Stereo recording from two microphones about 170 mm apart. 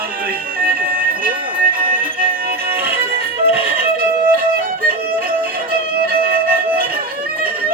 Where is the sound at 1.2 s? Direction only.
55° right (ahead or behind).